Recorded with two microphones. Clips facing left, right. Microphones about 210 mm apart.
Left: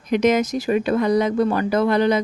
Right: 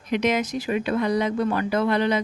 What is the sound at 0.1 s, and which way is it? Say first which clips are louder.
Speech: left 5 dB; 45° left (ahead or behind).